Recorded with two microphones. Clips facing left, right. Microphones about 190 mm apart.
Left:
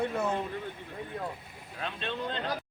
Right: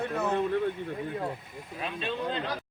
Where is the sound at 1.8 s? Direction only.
10° right (ahead or behind).